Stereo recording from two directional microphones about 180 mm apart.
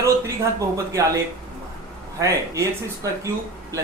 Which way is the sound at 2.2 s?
15° right (ahead or behind).